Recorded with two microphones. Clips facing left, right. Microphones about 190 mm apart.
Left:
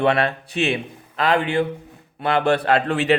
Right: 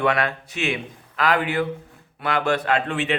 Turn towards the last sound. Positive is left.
turn(degrees=40)  # may be behind; listen again after turning